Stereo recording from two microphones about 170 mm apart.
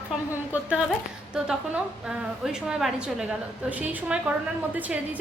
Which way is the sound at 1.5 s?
5° right (ahead or behind).